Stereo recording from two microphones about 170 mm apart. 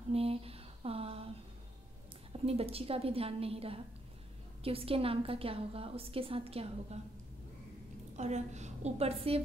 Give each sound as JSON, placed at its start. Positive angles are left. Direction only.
{"t": 0.1, "sound": "a sound", "side_deg": -35}
{"t": 2.4, "sound": "a woman's voice", "side_deg": -35}
{"t": 8.2, "sound": "a woman's voice", "side_deg": -40}